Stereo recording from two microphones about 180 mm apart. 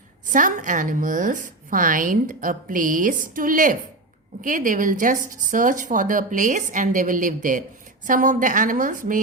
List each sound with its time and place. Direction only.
0.3 s a woman's voice: 45° right (ahead or behind)